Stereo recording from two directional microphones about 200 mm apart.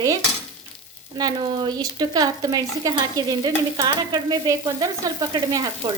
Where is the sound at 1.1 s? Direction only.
20° right (ahead or behind).